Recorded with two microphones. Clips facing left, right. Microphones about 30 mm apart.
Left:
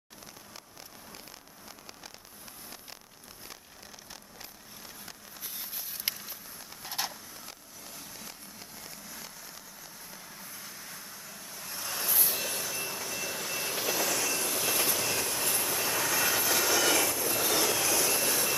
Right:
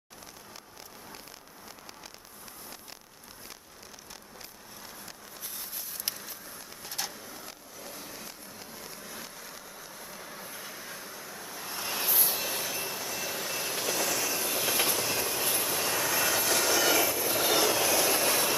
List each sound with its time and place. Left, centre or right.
5.0 s vehicle: centre
6.1 s a sound: left
6.8 s vehicle: centre
7.3 s a sound: centre
9.0 s vehicle: centre
12.1 s vehicle: centre
12.7 s train: centre